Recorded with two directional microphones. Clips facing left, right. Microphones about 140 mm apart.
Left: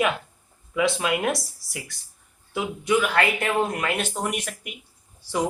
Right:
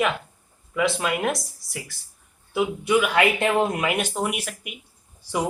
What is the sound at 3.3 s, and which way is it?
Speech, 25° right (ahead or behind).